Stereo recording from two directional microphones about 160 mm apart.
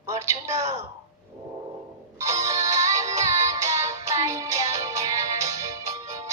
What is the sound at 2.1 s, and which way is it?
Music, 20° right (ahead or behind).